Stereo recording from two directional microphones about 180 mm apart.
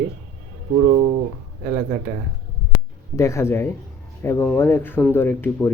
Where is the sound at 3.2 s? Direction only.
15° left (ahead or behind).